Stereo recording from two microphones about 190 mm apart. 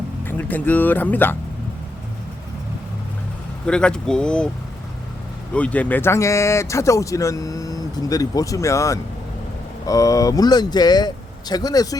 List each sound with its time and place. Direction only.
0.3 s speech: 10° left (ahead or behind)
3.7 s speech: 5° left (ahead or behind)
5.5 s speech: 5° left (ahead or behind)